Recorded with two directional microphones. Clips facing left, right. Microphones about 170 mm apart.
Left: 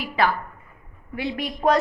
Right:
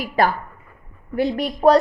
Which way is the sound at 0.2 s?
45° right (ahead or behind).